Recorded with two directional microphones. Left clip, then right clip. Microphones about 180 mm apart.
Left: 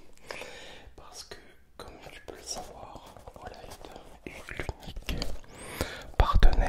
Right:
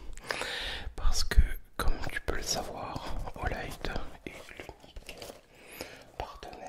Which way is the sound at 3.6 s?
40° right (ahead or behind).